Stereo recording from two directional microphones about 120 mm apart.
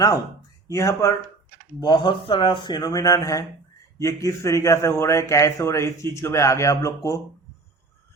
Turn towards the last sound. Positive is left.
turn(degrees=25)  # may be behind; listen again after turning